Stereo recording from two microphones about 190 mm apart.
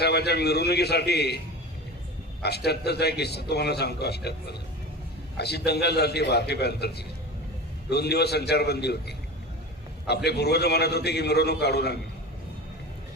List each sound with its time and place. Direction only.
0.0 s a man's voice: 60° left (ahead or behind)
2.4 s a man's voice: 60° left (ahead or behind)
5.4 s a man's voice: 60° left (ahead or behind)
10.2 s a man's voice: 60° left (ahead or behind)